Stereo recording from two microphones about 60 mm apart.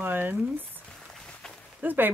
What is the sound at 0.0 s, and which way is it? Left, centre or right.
Speech, right.